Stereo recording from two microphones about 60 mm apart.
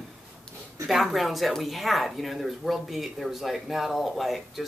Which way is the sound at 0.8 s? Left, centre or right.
Centre.